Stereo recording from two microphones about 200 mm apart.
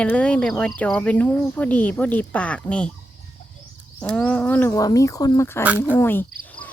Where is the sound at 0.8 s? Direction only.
5° left (ahead or behind).